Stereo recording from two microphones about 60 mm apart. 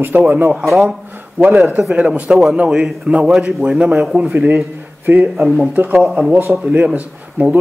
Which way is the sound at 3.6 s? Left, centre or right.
Right.